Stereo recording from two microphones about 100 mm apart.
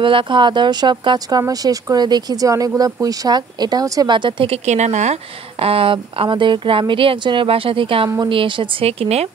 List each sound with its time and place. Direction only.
0.0 s speech: 55° right (ahead or behind); by 4.1 s 35° right (ahead or behind)
4.1 s speech: 55° right (ahead or behind); by 9.3 s 85° right